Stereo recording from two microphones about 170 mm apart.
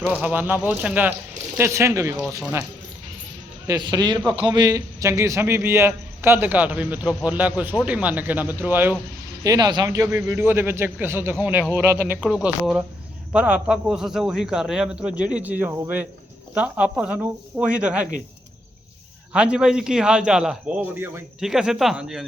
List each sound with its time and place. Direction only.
0.0 s a man's voice: 10° right (ahead or behind)
3.7 s a man's voice: 25° right (ahead or behind)
9.4 s a man's voice: 20° right (ahead or behind); by 18.1 s 5° right (ahead or behind)
19.3 s a man's voice: 5° right (ahead or behind)